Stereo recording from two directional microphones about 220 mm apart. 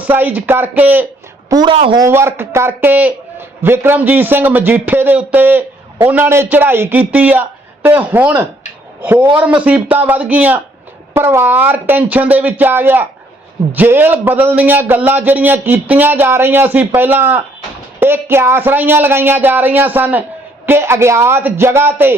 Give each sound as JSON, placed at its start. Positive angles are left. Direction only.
{"t": 0.0, "sound": "a man's voice", "side_deg": -10}
{"t": 1.5, "sound": "a woman's voice", "side_deg": -20}
{"t": 2.0, "sound": "a man's voice", "side_deg": -10}